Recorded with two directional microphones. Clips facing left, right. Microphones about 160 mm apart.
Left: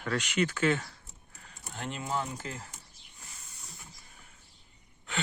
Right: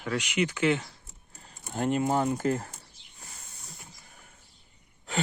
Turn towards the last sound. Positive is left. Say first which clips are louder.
# right 5 dB
turn(degrees=-40)  # may be behind; listen again after turning